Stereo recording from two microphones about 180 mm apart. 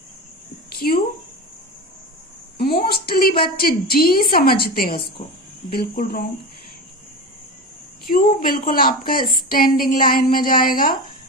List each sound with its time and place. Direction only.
0.8 s a woman's voice: 55° left (ahead or behind)
3.1 s a woman's voice: 60° left (ahead or behind)
8.0 s a woman's voice: 55° left (ahead or behind)